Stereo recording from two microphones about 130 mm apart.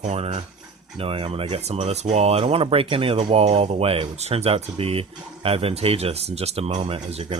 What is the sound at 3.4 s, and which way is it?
Speech, 55° right (ahead or behind).